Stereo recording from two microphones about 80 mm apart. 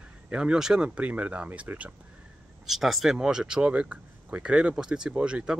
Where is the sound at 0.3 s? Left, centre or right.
Centre.